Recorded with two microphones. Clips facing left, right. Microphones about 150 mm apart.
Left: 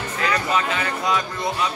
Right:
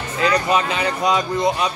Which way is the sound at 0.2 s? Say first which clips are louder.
Right 5 dB; 20° right (ahead or behind).